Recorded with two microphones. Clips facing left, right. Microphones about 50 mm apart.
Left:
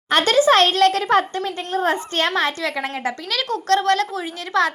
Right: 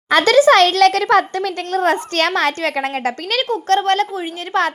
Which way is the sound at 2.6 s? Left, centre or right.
Right.